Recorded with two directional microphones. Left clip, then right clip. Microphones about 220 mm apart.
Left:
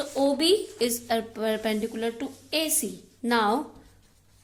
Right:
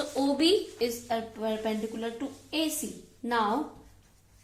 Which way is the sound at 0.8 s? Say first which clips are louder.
Left 4 dB; 50° left (ahead or behind).